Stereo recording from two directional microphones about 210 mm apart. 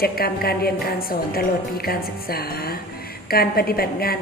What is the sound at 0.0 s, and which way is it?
A woman's voice, 45° left (ahead or behind).